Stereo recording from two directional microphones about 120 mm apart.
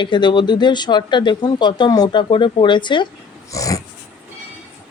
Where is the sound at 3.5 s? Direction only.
30° left (ahead or behind).